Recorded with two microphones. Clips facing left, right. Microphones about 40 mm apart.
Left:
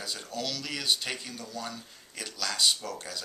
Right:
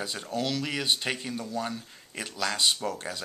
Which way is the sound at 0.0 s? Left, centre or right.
Right.